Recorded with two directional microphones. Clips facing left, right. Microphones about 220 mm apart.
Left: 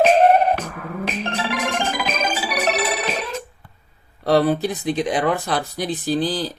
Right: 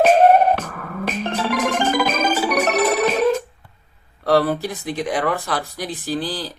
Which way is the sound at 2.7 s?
50° right (ahead or behind).